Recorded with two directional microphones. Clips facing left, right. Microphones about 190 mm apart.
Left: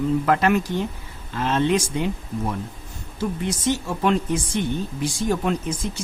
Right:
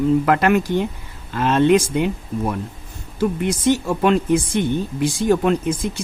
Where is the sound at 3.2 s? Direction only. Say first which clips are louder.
Right 6 dB; 60° right (ahead or behind).